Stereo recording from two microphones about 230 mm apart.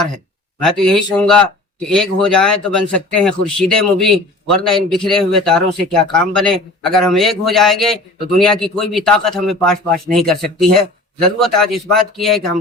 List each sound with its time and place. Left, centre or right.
0.6 s a man's voice: centre